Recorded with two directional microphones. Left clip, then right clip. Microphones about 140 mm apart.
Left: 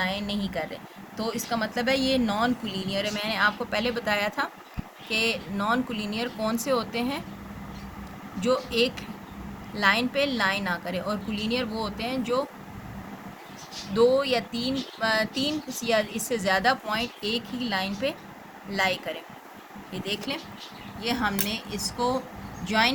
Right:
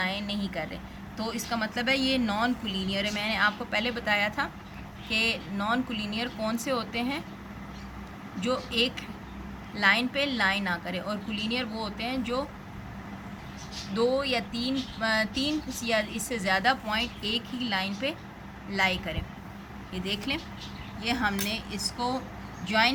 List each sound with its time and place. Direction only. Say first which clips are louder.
0.0 s a sound: left 2 dB; 45° left (ahead or behind)
1.1 s a woman's voice: left 3 dB; 40° left (ahead or behind)
8.4 s a woman's voice: left 3 dB; 45° left (ahead or behind)
13.9 s speech: left 5 dB; 40° left (ahead or behind)
20.3 s a woman's voice: right 1 dB; 35° left (ahead or behind)